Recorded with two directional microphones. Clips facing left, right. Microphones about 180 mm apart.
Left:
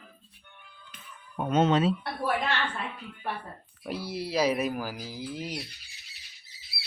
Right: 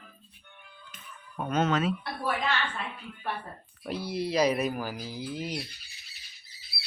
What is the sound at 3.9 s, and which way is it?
Speech, 5° left (ahead or behind).